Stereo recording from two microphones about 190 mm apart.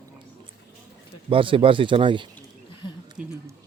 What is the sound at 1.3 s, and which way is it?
Speech, 30° right (ahead or behind).